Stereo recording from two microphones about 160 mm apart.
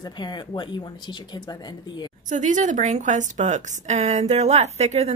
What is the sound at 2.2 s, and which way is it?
A woman's voice, 50° right (ahead or behind).